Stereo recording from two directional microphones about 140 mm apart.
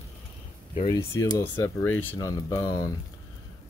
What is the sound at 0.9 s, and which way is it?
Speech, 20° left (ahead or behind).